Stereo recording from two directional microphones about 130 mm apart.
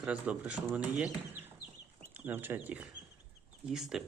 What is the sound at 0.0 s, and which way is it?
Speech, 10° right (ahead or behind).